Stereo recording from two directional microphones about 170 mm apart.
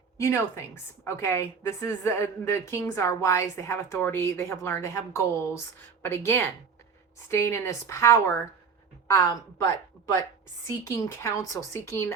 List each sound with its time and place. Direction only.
0.2 s a woman's voice: 15° left (ahead or behind)
10.9 s a woman's voice: 15° left (ahead or behind)